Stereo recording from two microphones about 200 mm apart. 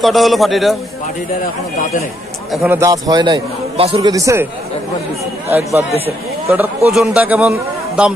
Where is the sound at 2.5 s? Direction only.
Centre (ahead or behind).